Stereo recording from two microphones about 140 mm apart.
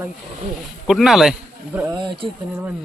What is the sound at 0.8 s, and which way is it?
Speech, centre (ahead or behind).